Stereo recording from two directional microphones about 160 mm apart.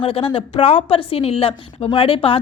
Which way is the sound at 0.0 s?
35° left (ahead or behind).